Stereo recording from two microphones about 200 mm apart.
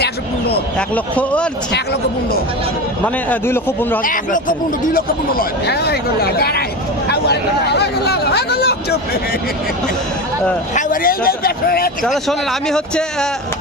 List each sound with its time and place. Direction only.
0.0 s a sound: 55° left (ahead or behind)
0.8 s speech: 5° left (ahead or behind)
3.2 s speech: 10° left (ahead or behind)
4.0 s speech: 40° left (ahead or behind)
10.8 s speech: 45° left (ahead or behind)
12.0 s speech: centre (ahead or behind)